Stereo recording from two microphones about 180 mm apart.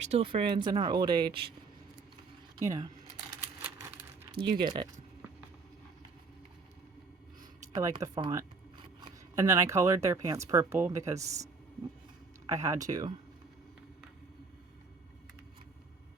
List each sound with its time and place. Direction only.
0.1 s speech: 35° right (ahead or behind)
2.6 s speech: 20° right (ahead or behind)
3.6 s a sound: 10° right (ahead or behind)
4.4 s speech: 25° right (ahead or behind)
7.7 s speech: 20° right (ahead or behind)
12.5 s speech: 15° right (ahead or behind)